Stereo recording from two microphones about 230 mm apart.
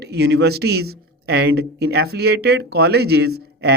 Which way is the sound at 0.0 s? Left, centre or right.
Right.